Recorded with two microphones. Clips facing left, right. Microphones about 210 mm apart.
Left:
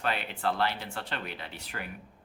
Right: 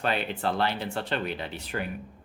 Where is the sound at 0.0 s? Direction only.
20° right (ahead or behind).